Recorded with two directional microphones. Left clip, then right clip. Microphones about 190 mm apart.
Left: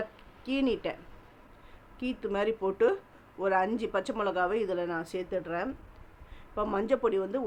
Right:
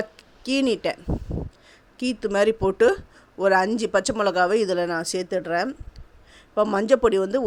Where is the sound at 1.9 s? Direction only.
45° right (ahead or behind).